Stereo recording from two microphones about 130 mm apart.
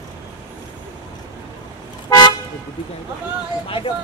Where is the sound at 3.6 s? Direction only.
40° left (ahead or behind).